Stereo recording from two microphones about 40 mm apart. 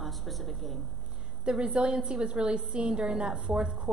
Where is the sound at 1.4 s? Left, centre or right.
Right.